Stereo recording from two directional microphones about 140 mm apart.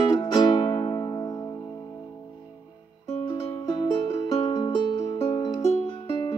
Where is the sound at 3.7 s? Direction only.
30° left (ahead or behind).